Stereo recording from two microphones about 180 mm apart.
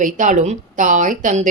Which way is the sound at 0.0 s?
45° right (ahead or behind).